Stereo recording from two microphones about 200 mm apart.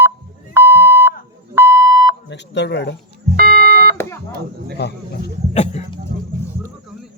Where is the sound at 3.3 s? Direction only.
50° right (ahead or behind).